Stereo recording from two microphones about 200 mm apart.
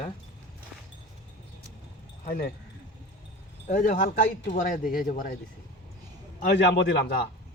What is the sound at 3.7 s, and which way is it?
Speech, 40° left (ahead or behind).